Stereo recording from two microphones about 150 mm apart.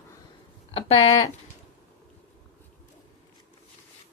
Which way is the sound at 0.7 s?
40° left (ahead or behind).